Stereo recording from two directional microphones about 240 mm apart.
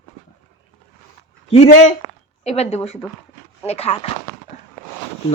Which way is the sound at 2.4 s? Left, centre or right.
Left.